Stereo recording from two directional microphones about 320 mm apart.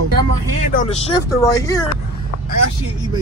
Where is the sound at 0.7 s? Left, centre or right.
Left.